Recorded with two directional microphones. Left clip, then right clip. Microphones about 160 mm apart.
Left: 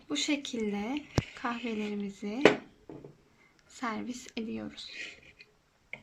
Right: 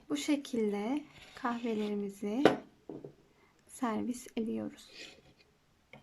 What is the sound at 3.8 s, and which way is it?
Speech, 15° right (ahead or behind).